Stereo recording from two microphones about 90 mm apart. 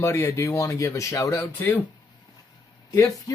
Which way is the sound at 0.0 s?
30° left (ahead or behind).